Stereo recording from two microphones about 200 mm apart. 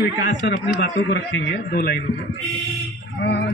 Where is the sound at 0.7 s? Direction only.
60° left (ahead or behind).